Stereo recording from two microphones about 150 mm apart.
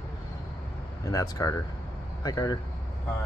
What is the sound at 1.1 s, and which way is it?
Speech, 20° left (ahead or behind).